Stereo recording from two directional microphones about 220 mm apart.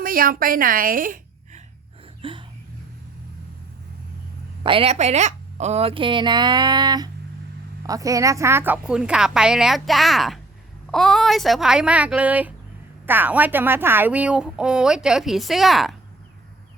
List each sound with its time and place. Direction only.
0.0 s a woman's voice: 40° right (ahead or behind)
2.2 s a sound: 25° right (ahead or behind)
4.6 s a woman's voice: 25° right (ahead or behind); by 16.0 s centre (ahead or behind)